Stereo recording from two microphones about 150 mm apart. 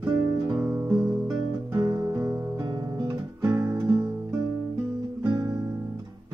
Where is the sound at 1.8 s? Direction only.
25° right (ahead or behind).